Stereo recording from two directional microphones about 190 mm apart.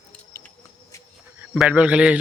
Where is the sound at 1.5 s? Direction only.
5° right (ahead or behind).